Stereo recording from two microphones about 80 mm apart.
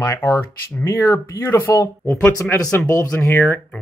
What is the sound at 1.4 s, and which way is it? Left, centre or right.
Speech, left.